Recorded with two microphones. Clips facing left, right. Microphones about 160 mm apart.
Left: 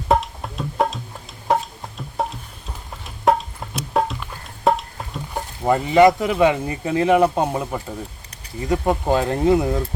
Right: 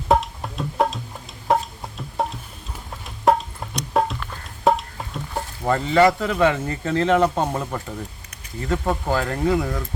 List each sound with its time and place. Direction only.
0.1 s music: centre (ahead or behind)
5.3 s speech: 15° left (ahead or behind)